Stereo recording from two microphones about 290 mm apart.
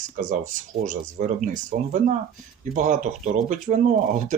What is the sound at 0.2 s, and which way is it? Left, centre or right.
Speech, right.